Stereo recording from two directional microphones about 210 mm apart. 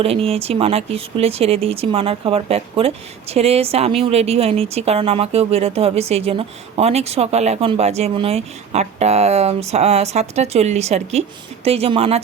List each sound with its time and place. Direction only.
0.0 s speech: 25° right (ahead or behind)